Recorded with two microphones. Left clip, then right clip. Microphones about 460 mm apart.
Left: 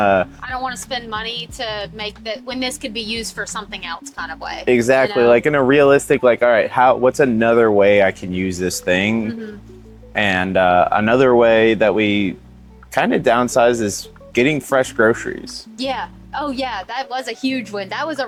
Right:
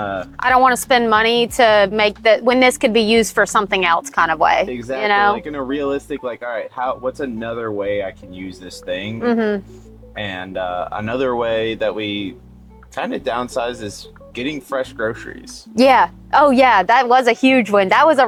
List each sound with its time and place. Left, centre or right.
0.0 s speech: left
0.3 s a woman's voice: right
4.7 s speech: left
10.2 s speech: left
15.7 s a woman's voice: right